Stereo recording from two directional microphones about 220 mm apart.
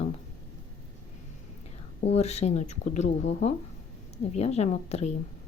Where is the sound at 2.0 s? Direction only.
30° left (ahead or behind).